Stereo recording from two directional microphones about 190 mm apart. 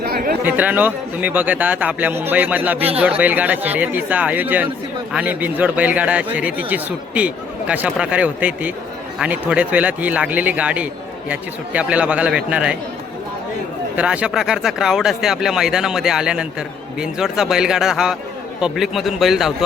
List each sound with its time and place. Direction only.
0.0 s chatter: 50° right (ahead or behind)
0.4 s a man's voice: 10° right (ahead or behind)
13.9 s speech: 5° right (ahead or behind)